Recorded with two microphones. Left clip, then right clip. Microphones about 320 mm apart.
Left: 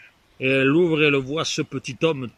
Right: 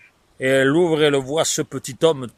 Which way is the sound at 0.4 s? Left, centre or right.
Centre.